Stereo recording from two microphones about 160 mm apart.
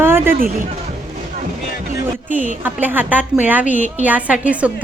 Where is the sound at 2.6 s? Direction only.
10° right (ahead or behind).